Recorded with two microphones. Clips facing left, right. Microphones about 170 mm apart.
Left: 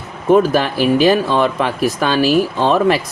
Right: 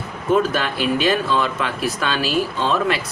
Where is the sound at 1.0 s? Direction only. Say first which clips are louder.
Left 5 dB; 35° left (ahead or behind).